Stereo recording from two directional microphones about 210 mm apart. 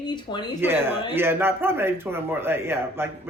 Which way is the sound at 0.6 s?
10° right (ahead or behind).